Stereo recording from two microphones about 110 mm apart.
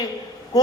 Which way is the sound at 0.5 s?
35° left (ahead or behind).